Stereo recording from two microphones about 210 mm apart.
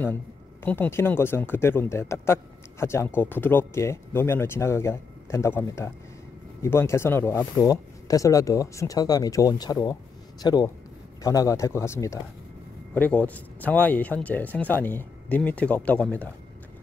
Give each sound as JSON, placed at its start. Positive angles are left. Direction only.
{"t": 0.7, "sound": "speech", "side_deg": 10}